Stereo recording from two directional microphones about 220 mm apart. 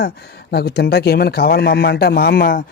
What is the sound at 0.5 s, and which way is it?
Speech, 45° left (ahead or behind).